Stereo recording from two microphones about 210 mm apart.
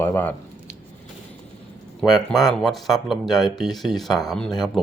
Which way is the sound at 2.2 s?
5° left (ahead or behind).